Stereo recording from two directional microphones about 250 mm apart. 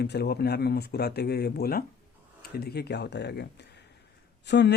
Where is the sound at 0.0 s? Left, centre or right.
Left.